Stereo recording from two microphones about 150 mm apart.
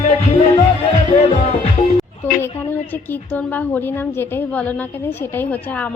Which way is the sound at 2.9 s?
10° left (ahead or behind).